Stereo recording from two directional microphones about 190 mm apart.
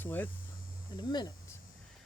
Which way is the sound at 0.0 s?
10° left (ahead or behind).